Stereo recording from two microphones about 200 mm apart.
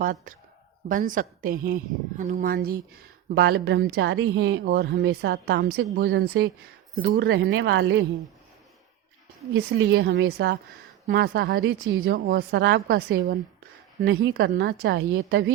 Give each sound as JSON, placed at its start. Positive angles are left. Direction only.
{"t": 0.0, "sound": "a woman's voice", "side_deg": -45}
{"t": 9.6, "sound": "a woman's voice", "side_deg": -70}